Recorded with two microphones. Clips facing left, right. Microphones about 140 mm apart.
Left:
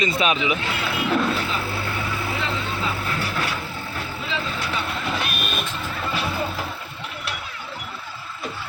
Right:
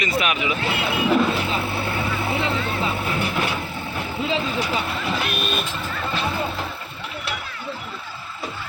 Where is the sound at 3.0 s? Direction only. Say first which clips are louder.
Right 3 dB; 20° right (ahead or behind).